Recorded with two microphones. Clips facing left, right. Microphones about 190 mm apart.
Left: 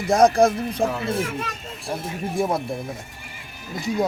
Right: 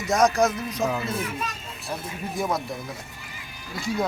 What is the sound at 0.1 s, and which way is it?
Speech, 30° left (ahead or behind).